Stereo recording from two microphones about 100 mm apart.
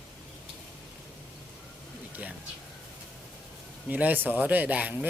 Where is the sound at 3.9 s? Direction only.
15° right (ahead or behind).